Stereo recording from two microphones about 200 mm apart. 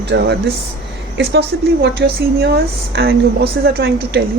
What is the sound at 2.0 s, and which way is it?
A woman's voice, 55° right (ahead or behind).